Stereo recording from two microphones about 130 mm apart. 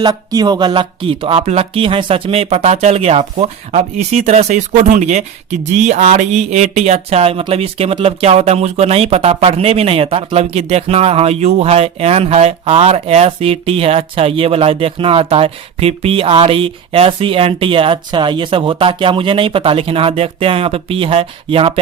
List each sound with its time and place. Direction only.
0.0 s speech: 30° right (ahead or behind); by 21.7 s 45° right (ahead or behind)